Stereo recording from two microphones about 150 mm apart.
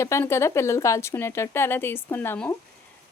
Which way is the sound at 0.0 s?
15° left (ahead or behind).